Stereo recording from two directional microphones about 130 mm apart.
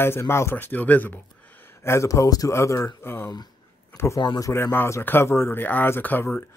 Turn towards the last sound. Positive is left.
turn(degrees=15)  # may be behind; listen again after turning